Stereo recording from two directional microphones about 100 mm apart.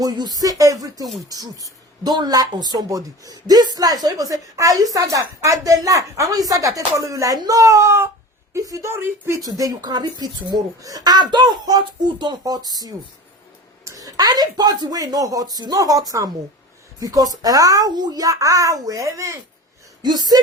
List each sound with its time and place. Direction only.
0.0 s a woman's voice: 40° right (ahead or behind)
9.4 s speech: 40° right (ahead or behind)
20.0 s speech: 45° right (ahead or behind)